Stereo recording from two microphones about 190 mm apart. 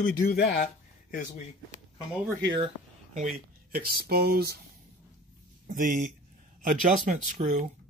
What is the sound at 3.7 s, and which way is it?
Speech, 50° right (ahead or behind).